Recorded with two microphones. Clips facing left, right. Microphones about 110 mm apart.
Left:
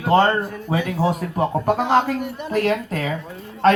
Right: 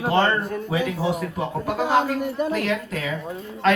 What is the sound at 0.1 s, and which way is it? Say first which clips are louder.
Speech: left 5 dB; 40° left (ahead or behind).